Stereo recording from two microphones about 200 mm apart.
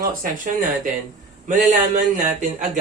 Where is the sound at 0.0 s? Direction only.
45° right (ahead or behind).